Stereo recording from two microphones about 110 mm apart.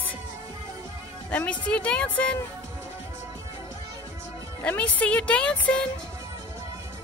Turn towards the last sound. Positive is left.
turn(degrees=10)  # may be behind; listen again after turning